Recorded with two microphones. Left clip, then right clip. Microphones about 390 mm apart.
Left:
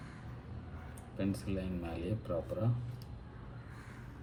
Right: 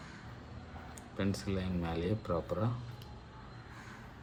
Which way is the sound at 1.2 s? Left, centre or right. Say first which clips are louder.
Right 1 dB; centre.